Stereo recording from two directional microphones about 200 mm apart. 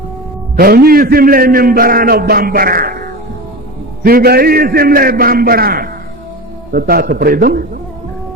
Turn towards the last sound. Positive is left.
turn(degrees=-50)  # may be behind; listen again after turning